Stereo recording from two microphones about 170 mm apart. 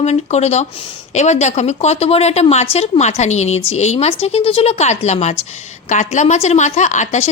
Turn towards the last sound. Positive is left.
turn(degrees=45)  # may be behind; listen again after turning